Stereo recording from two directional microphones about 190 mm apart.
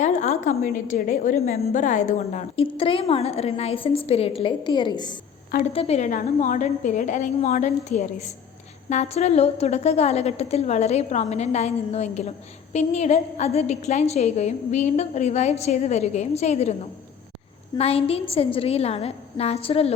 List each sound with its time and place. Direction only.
0.0 s a sound: 40° left (ahead or behind)
0.6 s a woman's voice: 45° left (ahead or behind)
17.7 s a woman's voice: 30° left (ahead or behind)